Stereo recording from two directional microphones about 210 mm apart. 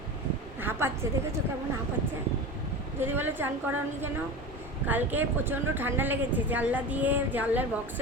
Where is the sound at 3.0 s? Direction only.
10° right (ahead or behind).